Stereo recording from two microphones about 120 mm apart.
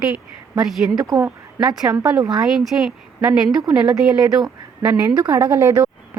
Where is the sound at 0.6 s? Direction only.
Centre (ahead or behind).